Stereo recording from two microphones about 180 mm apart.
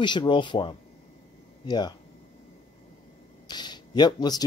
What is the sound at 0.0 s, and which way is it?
Speech, 25° left (ahead or behind).